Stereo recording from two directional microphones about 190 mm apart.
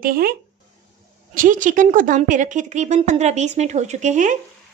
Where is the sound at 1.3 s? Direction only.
45° right (ahead or behind).